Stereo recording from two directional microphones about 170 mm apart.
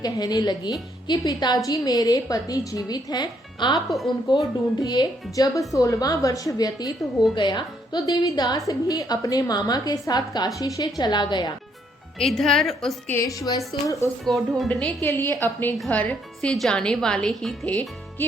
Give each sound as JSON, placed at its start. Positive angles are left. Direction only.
{"t": 0.0, "sound": "a woman's voice", "side_deg": 25}
{"t": 3.8, "sound": "speech", "side_deg": 0}
{"t": 4.3, "sound": "a woman's voice", "side_deg": 25}
{"t": 12.2, "sound": "speech", "side_deg": 0}
{"t": 13.1, "sound": "a woman's voice", "side_deg": 20}
{"t": 14.3, "sound": "a woman's voice", "side_deg": 0}